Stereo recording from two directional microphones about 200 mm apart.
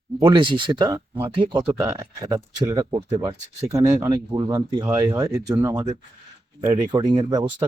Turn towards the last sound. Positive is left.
turn(degrees=-20)  # may be behind; listen again after turning